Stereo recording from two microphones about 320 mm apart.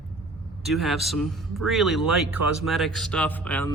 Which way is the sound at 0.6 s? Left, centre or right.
Centre.